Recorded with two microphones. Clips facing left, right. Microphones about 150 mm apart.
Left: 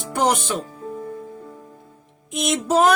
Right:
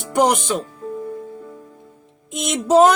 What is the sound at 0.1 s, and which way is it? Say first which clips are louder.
Speech: right 3 dB; 15° right (ahead or behind).